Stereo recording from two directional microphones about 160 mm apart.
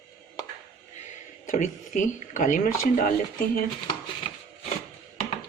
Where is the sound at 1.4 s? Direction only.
50° left (ahead or behind).